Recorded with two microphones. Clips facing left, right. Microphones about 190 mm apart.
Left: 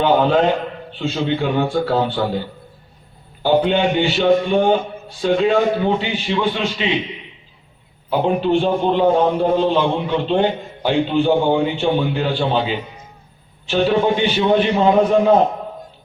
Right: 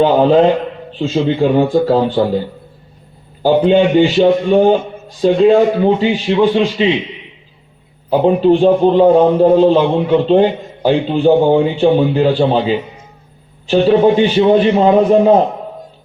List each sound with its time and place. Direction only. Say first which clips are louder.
0.0 s a man's voice: right 5 dB; 35° right (ahead or behind)
3.4 s a man's voice: right 5 dB; 35° right (ahead or behind)
8.2 s a man's voice: right 7 dB; 35° right (ahead or behind)